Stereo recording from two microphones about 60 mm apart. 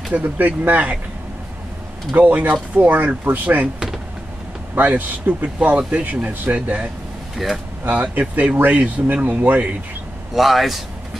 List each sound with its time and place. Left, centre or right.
0.1 s speech: right
2.1 s speech: right
4.7 s speech: right
7.3 s a man's voice: centre
7.8 s speech: right
10.3 s a man's voice: centre